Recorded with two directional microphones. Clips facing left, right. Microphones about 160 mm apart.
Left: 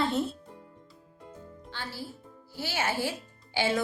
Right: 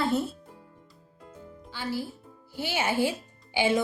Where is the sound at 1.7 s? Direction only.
10° right (ahead or behind).